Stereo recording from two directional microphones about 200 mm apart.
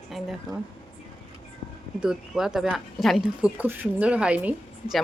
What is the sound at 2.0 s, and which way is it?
Speech, centre (ahead or behind).